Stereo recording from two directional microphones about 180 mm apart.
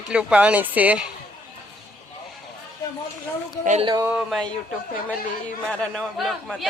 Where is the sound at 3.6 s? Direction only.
40° right (ahead or behind).